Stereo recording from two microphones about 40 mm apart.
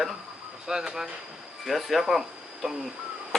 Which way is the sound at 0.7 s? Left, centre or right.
Centre.